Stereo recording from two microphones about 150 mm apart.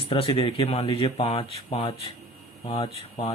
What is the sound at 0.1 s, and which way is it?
Speech, 40° left (ahead or behind).